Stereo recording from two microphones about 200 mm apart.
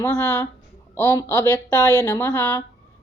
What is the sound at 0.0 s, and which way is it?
A woman's voice, 15° left (ahead or behind).